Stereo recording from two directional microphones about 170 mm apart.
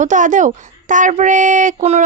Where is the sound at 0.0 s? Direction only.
45° right (ahead or behind).